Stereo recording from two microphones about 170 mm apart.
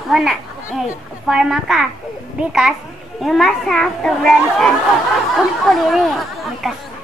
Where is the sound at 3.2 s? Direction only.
Centre (ahead or behind).